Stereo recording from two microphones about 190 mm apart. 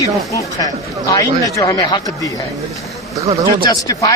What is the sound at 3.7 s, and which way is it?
Speech, 20° left (ahead or behind).